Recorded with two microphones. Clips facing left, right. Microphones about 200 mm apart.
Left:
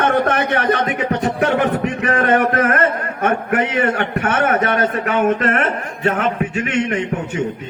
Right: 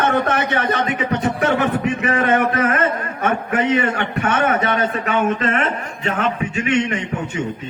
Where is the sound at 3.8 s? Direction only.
50° left (ahead or behind).